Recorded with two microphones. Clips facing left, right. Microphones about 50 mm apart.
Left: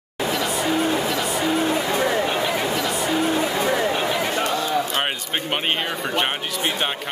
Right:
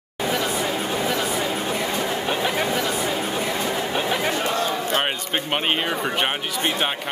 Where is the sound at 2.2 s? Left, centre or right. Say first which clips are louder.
Left 1 dB; centre.